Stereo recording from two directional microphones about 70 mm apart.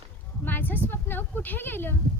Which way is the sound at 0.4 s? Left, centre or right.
Left.